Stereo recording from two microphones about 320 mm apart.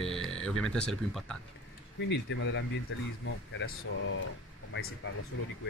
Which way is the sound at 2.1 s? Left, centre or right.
Left.